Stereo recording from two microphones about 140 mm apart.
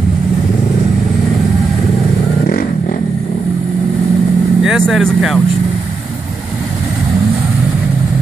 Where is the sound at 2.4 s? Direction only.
90° left.